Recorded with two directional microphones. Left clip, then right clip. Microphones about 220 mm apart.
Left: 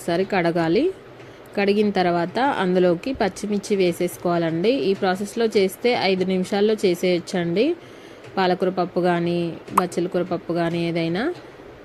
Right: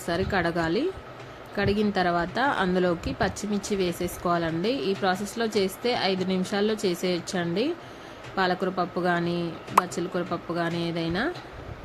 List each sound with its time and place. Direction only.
0.1 s a woman's voice: 20° left (ahead or behind)